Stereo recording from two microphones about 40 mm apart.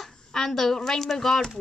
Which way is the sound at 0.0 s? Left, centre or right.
Centre.